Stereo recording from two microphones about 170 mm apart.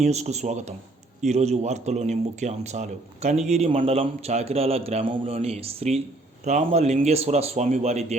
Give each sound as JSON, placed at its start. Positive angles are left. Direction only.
{"t": 0.0, "sound": "a man's voice", "side_deg": -40}